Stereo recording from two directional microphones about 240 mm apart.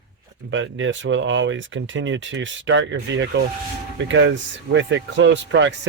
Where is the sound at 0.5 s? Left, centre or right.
Right.